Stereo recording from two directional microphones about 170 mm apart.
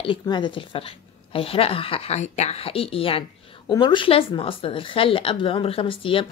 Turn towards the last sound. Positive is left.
turn(degrees=30)  # may be behind; listen again after turning